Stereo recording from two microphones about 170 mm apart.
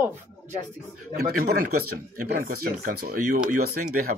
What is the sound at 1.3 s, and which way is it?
Speech, 60° right (ahead or behind).